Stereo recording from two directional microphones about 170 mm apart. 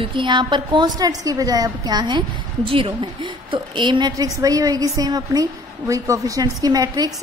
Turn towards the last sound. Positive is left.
turn(degrees=-20)  # may be behind; listen again after turning